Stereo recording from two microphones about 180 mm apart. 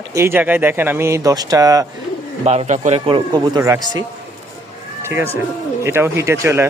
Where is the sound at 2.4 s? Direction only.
40° right (ahead or behind).